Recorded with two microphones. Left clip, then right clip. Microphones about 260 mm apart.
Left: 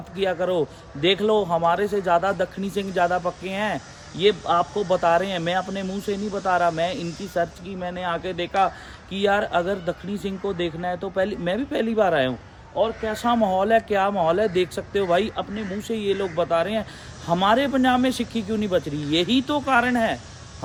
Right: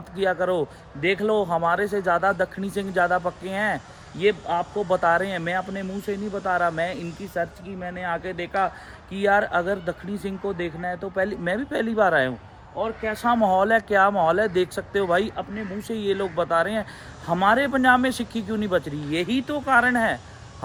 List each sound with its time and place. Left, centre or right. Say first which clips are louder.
0.2 s speech: even; centre
19.3 s speech: left 4 dB; centre
19.5 s speech: right 2 dB; centre